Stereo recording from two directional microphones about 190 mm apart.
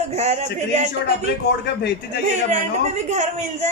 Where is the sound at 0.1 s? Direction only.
35° right (ahead or behind).